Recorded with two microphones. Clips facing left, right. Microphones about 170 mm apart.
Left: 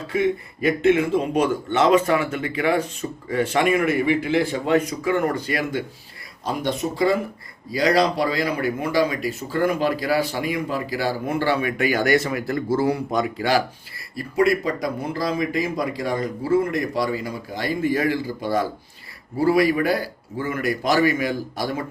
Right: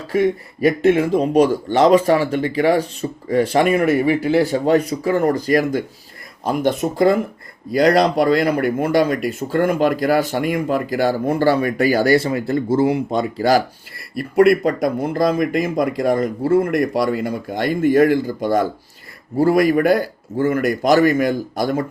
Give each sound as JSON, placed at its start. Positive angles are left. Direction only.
{"t": 0.1, "sound": "speech", "side_deg": -40}
{"t": 6.4, "sound": "speech", "side_deg": -55}
{"t": 14.2, "sound": "speech", "side_deg": -60}